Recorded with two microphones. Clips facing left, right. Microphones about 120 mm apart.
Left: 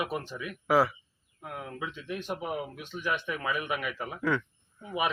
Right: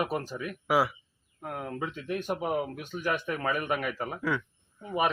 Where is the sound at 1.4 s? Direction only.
45° right (ahead or behind).